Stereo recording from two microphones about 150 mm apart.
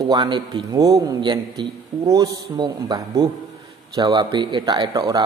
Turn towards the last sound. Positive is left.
turn(degrees=-30)  # may be behind; listen again after turning